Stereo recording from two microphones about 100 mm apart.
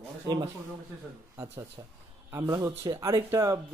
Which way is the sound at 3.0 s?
35° right (ahead or behind).